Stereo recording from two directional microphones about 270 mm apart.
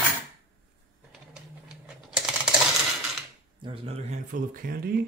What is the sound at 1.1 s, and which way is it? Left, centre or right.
Printer, centre.